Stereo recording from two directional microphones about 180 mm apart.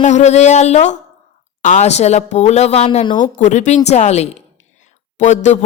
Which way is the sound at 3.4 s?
40° left (ahead or behind).